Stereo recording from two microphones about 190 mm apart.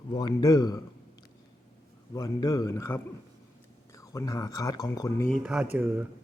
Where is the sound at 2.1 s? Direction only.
20° left (ahead or behind).